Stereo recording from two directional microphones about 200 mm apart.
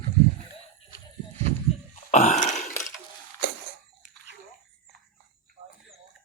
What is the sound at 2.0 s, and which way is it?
Burping, 35° left (ahead or behind).